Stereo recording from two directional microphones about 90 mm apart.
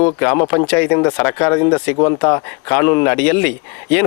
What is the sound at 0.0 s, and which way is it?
Speech, 20° left (ahead or behind).